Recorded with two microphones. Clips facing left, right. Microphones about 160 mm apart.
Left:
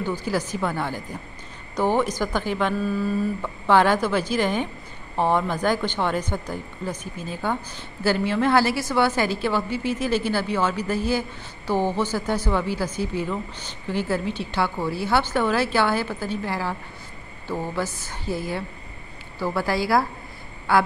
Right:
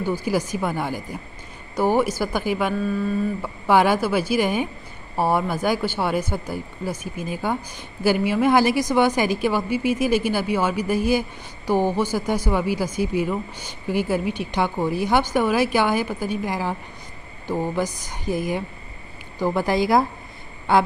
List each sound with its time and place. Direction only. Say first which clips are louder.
0.0 s a woman's voice: right 3 dB; 10° right (ahead or behind)
2.7 s mantra: right 1 dB; centre (ahead or behind)
3.4 s a woman's voice: right 1 dB; 10° right (ahead or behind)